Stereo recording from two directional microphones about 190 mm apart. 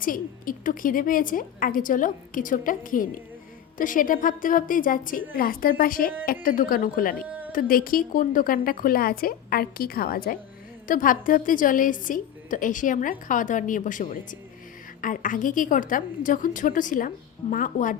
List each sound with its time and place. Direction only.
0.0 s a woman's voice: 45° left (ahead or behind)
7.3 s a sound: 10° right (ahead or behind)
7.5 s a woman's voice: 50° left (ahead or behind)